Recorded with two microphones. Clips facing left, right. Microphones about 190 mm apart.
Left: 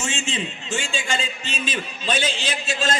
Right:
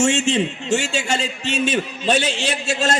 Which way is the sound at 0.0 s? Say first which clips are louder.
Right 10 dB; 70° right (ahead or behind).